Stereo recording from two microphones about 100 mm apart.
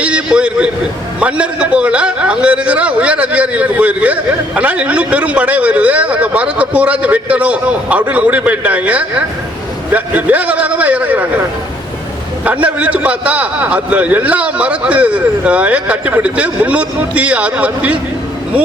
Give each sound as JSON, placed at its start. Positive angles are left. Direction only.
{"t": 0.0, "sound": "a man's voice", "side_deg": -10}
{"t": 12.5, "sound": "a man's voice", "side_deg": -15}